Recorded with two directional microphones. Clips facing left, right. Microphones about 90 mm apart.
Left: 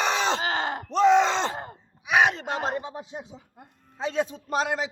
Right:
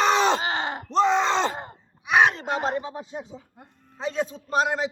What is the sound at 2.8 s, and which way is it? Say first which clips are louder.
Speech: right 2 dB; 15° left (ahead or behind).